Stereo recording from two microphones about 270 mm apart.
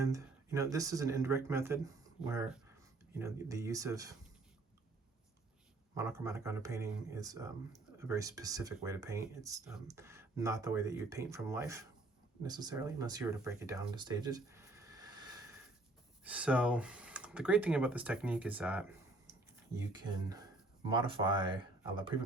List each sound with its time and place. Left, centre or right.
0.0 s speech: centre
5.9 s speech: centre
19.9 s speech: centre